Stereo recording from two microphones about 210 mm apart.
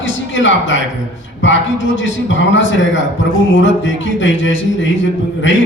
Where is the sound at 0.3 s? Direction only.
60° left (ahead or behind).